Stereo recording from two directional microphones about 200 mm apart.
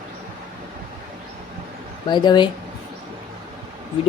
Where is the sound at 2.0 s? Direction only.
20° left (ahead or behind).